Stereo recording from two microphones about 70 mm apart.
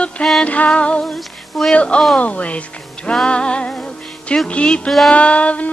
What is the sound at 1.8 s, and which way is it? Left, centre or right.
Speech, centre.